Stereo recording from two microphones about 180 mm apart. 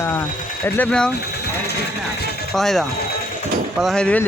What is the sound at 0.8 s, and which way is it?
Speech, 5° left (ahead or behind).